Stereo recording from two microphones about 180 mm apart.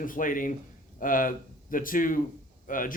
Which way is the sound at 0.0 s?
50° left (ahead or behind).